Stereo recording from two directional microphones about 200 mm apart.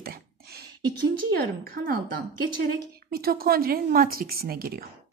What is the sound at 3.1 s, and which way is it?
A woman's voice, 50° right (ahead or behind).